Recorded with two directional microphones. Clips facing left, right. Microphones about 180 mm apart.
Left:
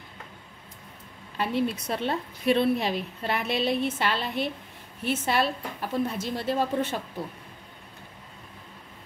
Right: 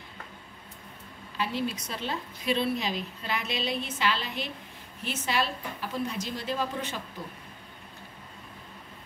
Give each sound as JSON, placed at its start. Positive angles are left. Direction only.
{"t": 1.4, "sound": "a woman's voice", "side_deg": 60}